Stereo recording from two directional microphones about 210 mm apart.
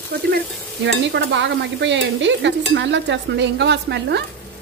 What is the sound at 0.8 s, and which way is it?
Stir, 55° right (ahead or behind).